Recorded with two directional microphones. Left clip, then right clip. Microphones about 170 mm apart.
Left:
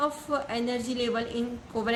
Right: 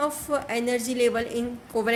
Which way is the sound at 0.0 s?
35° right (ahead or behind).